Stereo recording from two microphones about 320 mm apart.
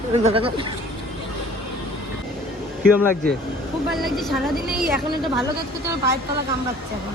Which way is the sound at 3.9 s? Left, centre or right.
Centre.